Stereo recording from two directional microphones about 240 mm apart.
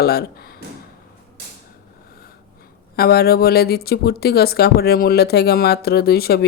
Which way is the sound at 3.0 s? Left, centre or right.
Left.